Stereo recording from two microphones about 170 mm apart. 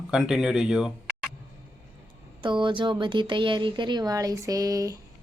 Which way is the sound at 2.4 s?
30° right (ahead or behind).